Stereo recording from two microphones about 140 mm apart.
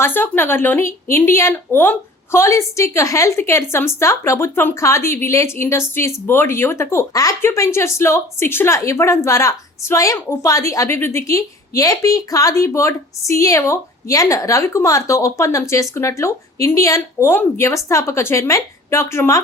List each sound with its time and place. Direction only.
0.0 s a woman's voice: 15° left (ahead or behind)